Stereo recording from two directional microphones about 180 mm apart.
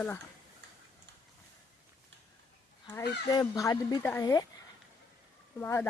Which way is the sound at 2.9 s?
20° left (ahead or behind).